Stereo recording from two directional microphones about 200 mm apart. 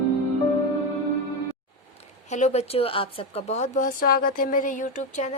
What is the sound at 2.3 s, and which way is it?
Speech, 35° left (ahead or behind).